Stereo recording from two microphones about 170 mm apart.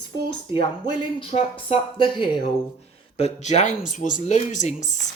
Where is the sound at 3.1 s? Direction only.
40° left (ahead or behind).